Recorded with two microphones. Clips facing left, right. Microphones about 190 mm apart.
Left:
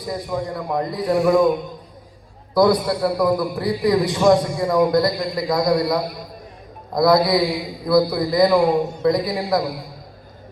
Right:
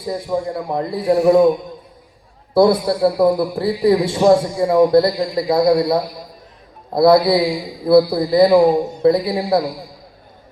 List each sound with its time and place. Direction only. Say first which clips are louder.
0.3 s a man's voice: right 4 dB; 30° right (ahead or behind)
2.6 s a man's voice: right 3 dB; 30° right (ahead or behind)